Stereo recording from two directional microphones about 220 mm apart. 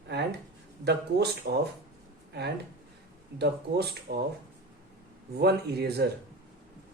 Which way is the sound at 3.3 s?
50° right (ahead or behind).